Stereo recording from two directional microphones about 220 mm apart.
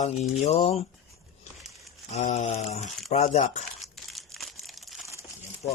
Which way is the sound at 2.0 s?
30° left (ahead or behind).